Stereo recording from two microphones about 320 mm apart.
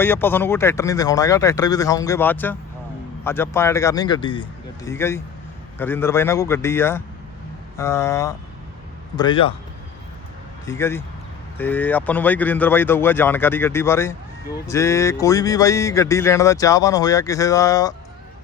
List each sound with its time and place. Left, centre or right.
0.0 s speech: centre
10.7 s speech: centre